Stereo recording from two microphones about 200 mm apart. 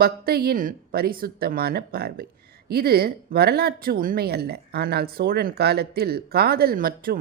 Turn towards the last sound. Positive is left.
turn(degrees=-45)  # may be behind; listen again after turning